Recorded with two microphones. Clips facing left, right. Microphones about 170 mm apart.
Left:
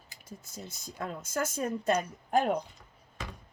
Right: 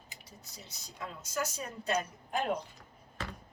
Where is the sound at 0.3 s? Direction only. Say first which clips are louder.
Left 11 dB; 50° left (ahead or behind).